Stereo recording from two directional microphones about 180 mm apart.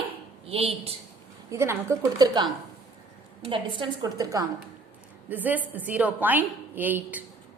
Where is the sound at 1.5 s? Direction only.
15° right (ahead or behind).